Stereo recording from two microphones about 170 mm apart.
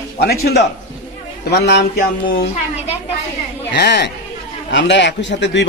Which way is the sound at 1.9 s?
55° left (ahead or behind).